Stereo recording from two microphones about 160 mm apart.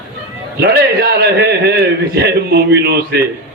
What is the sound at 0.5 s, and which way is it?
A man's voice, 90° right.